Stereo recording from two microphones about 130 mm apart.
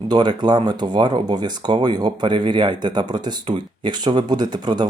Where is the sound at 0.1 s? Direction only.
35° right (ahead or behind).